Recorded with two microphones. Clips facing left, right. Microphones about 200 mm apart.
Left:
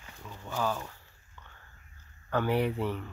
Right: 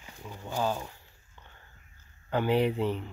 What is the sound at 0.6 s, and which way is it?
Speech, 20° right (ahead or behind).